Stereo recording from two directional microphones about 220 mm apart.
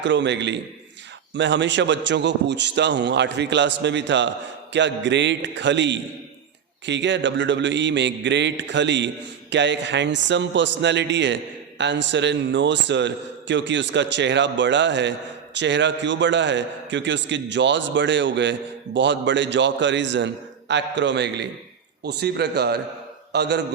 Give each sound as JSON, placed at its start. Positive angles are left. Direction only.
{"t": 0.0, "sound": "a man's voice", "side_deg": -55}